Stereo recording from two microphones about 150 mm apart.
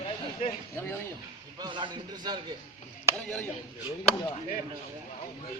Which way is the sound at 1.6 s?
30° right (ahead or behind).